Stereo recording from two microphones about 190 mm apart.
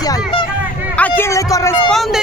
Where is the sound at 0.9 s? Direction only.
10° left (ahead or behind).